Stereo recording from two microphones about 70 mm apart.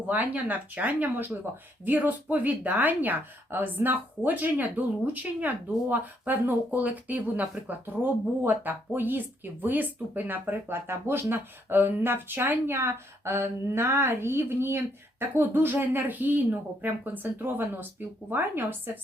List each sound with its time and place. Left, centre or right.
0.1 s speech: right